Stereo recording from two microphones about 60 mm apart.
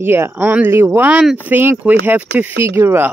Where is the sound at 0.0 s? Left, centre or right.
Right.